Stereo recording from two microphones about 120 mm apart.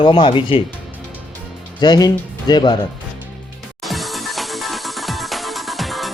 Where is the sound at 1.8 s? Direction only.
35° left (ahead or behind).